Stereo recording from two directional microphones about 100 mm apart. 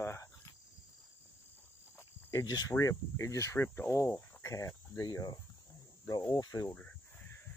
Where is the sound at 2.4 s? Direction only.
35° left (ahead or behind).